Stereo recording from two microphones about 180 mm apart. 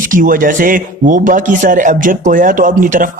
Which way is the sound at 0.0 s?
50° right (ahead or behind).